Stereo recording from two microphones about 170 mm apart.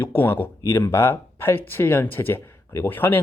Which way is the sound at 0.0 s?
10° left (ahead or behind).